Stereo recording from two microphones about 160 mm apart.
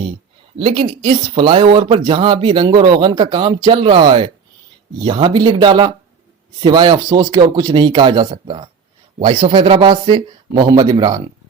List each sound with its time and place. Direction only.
0.6 s speech: 30° right (ahead or behind)